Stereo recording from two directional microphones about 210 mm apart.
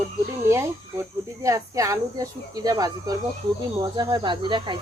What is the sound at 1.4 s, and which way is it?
Speech, 15° right (ahead or behind).